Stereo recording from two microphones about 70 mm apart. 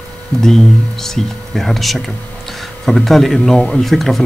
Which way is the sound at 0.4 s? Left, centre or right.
Centre.